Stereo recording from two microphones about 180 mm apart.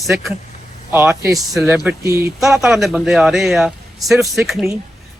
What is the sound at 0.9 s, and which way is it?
Speech, 10° right (ahead or behind).